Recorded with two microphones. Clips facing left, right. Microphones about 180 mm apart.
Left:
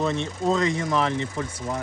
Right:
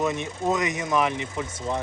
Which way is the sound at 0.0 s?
15° right (ahead or behind).